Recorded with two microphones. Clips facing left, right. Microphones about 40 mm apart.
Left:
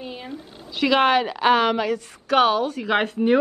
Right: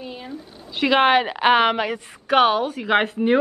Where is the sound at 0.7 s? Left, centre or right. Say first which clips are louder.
Right 1 dB; centre.